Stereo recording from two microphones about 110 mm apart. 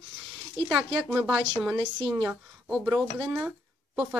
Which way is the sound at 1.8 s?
50° right (ahead or behind).